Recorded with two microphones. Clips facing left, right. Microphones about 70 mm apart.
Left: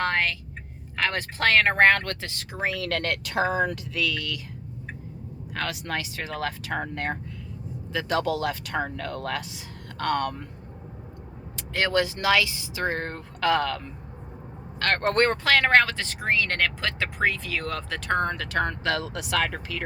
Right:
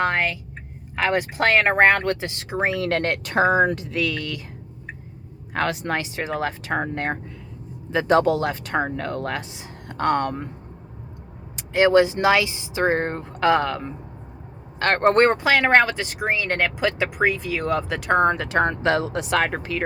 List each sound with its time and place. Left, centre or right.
0.0 s vehicle: centre
0.9 s speech: centre; by 4.4 s right
5.5 s speech: right
11.5 s speech: centre; by 19.8 s right